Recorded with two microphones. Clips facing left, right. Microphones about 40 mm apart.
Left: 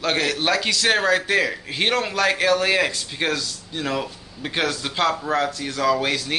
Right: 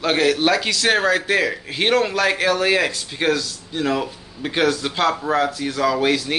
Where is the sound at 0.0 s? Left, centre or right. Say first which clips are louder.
Right 4 dB; centre.